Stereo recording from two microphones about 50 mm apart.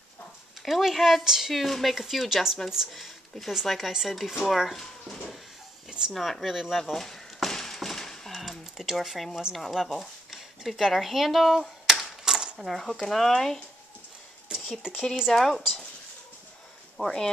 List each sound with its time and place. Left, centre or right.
0.6 s speech: centre
5.9 s a sound: centre
6.1 s speech: centre
6.8 s a sound: centre
9.4 s speech: centre
11.9 s typewriter: centre
12.6 s speech: centre
14.5 s speech: centre
15.3 s speech: centre
17.0 s speech: centre